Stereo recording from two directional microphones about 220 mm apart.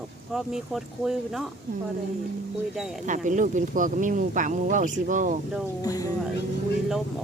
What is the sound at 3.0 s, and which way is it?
Speech, 35° right (ahead or behind).